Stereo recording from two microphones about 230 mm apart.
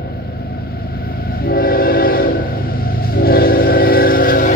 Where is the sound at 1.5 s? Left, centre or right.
Left.